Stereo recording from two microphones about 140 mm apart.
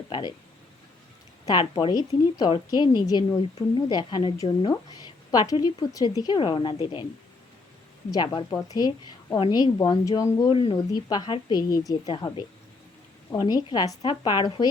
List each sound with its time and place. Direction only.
0.1 s a woman's voice: 30° left (ahead or behind)
1.5 s a woman's voice: 30° left (ahead or behind)
8.1 s speech: 30° left (ahead or behind)
10.5 s a woman's voice: 40° left (ahead or behind)
13.3 s a woman's voice: 30° left (ahead or behind)